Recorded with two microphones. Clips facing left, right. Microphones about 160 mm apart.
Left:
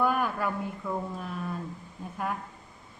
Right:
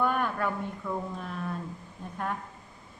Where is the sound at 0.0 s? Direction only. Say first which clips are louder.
Left 1 dB; 5° left (ahead or behind).